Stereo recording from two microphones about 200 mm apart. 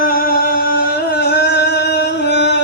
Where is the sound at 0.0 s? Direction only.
50° left (ahead or behind).